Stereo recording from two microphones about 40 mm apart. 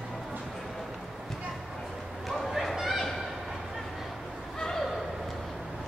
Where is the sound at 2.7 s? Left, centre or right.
Centre.